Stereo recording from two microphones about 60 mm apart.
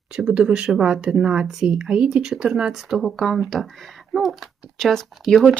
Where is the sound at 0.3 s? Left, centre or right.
Centre.